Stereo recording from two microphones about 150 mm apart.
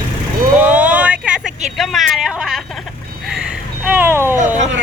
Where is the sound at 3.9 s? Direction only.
15° right (ahead or behind).